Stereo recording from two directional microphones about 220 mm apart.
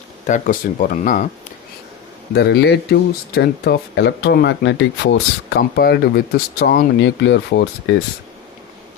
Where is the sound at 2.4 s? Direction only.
50° left (ahead or behind).